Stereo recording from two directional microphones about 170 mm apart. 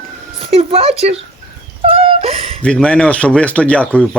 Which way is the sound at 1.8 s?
35° right (ahead or behind).